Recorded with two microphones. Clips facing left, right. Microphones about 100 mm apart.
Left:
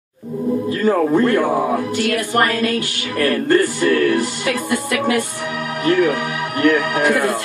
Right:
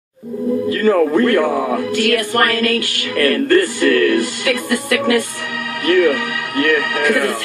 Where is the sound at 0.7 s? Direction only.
20° left (ahead or behind).